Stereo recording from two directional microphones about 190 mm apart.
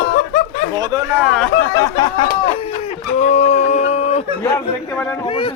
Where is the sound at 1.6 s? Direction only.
20° left (ahead or behind).